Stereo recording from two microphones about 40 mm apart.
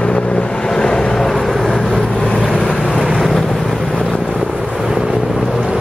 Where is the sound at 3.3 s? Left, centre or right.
Centre.